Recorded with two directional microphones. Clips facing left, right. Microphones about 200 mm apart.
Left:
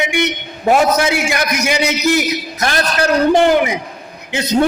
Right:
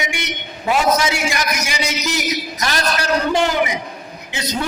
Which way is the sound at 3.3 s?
55° left (ahead or behind).